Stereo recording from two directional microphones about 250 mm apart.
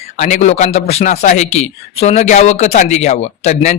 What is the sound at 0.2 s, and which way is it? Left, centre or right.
A man's voice, left.